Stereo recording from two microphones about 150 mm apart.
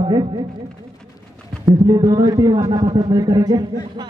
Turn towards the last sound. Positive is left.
turn(degrees=-25)  # may be behind; listen again after turning